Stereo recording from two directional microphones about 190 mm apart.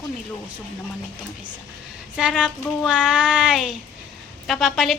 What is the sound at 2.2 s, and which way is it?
A woman's voice, 5° right (ahead or behind).